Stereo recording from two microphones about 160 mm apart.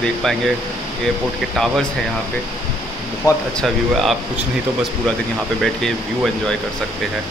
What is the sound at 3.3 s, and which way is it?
Speech, 25° left (ahead or behind).